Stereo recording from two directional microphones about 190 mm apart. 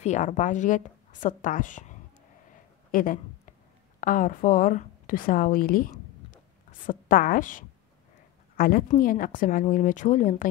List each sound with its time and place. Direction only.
0.0 s a woman's voice: 40° left (ahead or behind)
2.9 s a sound: 45° left (ahead or behind)
4.0 s a woman's voice: 45° left (ahead or behind)